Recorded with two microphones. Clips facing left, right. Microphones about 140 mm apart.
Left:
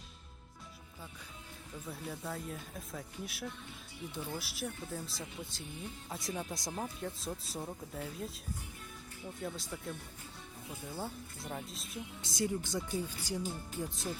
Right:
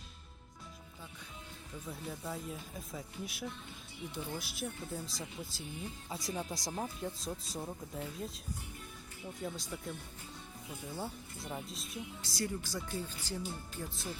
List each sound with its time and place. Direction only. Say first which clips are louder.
1.9 s speech: even; centre (ahead or behind)
10.9 s speech: even; centre (ahead or behind)
12.2 s speech: left 4 dB; 20° left (ahead or behind)